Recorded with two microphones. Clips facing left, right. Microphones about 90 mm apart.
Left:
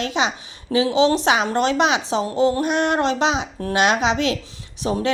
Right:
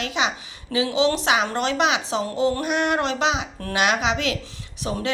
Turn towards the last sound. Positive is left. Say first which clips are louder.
# left 5 dB
turn(degrees=30)  # may be behind; listen again after turning